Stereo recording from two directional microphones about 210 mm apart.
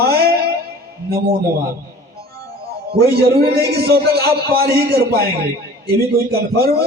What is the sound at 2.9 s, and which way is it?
A man's voice, 50° right (ahead or behind).